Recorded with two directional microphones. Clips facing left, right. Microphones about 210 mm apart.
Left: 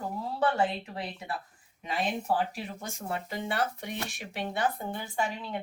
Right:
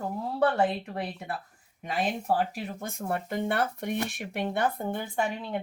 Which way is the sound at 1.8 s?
50° right (ahead or behind).